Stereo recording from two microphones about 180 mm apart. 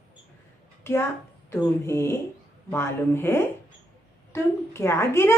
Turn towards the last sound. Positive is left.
turn(degrees=15)  # may be behind; listen again after turning